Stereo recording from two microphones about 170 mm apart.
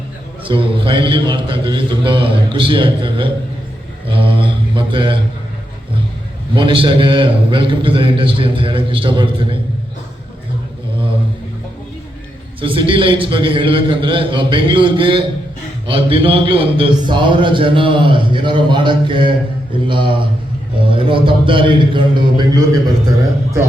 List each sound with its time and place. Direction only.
0.4 s speech: 30° right (ahead or behind)
4.1 s mantra: 30° right (ahead or behind)
6.5 s a man's voice: 30° right (ahead or behind)
12.5 s speech: 30° right (ahead or behind)